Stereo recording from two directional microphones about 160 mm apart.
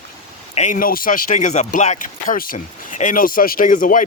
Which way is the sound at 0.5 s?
55° left (ahead or behind).